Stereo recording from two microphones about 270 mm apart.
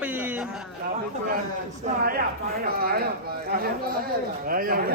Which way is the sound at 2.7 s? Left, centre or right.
Right.